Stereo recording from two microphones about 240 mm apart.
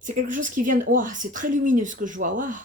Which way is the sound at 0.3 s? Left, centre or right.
Right.